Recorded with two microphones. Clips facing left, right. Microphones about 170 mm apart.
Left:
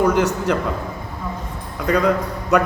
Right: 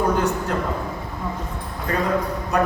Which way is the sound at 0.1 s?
90° left.